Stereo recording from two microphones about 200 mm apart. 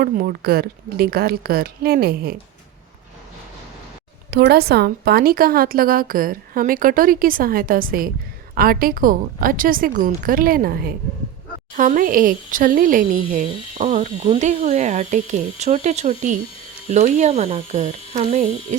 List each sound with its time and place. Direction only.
0.0 s a woman's voice: 50° right (ahead or behind)
4.3 s a woman's voice: 55° right (ahead or behind); by 18.8 s 35° right (ahead or behind)